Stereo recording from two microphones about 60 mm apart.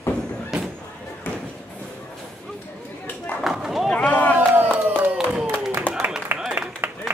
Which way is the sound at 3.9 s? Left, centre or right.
Left.